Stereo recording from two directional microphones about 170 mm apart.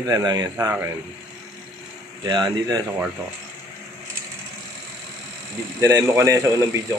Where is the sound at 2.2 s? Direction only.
25° right (ahead or behind).